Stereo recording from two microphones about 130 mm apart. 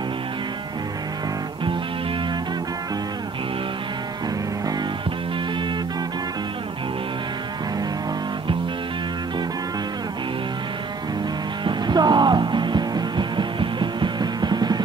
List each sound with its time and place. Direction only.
11.6 s music: 35° right (ahead or behind)